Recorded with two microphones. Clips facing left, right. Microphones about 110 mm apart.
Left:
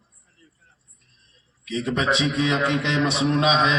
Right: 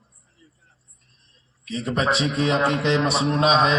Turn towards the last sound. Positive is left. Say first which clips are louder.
# right 1 dB
turn(degrees=-40)  # may be behind; listen again after turning